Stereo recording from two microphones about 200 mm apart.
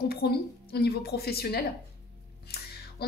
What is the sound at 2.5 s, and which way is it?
Music, 50° left (ahead or behind).